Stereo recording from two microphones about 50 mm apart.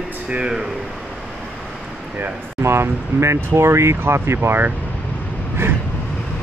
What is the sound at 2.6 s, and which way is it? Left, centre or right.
Speech, right.